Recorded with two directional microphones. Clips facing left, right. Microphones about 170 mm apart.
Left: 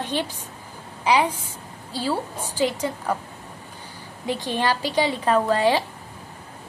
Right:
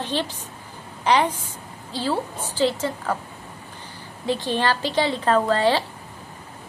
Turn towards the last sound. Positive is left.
turn(degrees=15)  # may be behind; listen again after turning